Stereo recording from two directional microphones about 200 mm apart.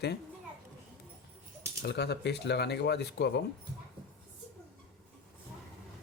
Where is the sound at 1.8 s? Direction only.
55° left (ahead or behind).